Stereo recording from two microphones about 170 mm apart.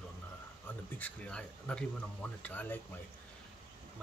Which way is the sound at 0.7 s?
10° left (ahead or behind).